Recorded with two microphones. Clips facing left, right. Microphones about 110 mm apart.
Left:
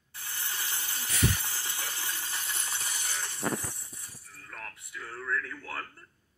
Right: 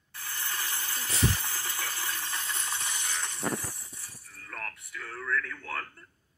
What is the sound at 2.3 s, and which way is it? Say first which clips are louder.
Water: right 2 dB; 35° right (ahead or behind).